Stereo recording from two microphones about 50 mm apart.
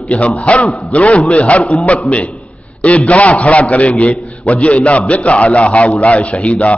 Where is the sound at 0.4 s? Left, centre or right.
Left.